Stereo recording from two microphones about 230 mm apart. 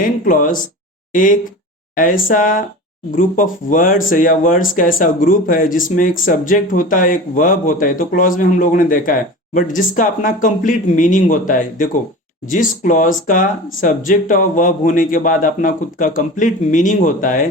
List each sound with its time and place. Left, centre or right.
0.3 s speech: left